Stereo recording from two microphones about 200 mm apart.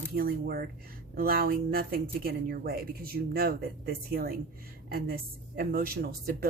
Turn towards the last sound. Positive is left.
turn(degrees=-50)  # may be behind; listen again after turning